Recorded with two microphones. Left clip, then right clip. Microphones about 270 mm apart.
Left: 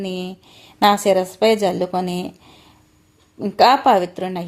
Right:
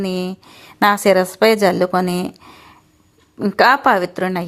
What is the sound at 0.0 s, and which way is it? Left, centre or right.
A woman's voice, centre.